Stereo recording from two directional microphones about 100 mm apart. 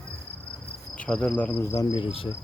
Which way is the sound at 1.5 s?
30° left (ahead or behind).